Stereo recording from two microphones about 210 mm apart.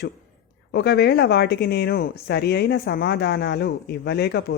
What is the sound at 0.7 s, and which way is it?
Speech, 50° left (ahead or behind).